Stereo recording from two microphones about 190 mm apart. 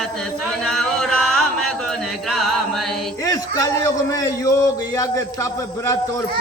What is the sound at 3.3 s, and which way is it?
A man's voice, 20° left (ahead or behind).